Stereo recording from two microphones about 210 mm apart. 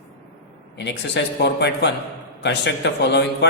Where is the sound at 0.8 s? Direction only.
55° left (ahead or behind).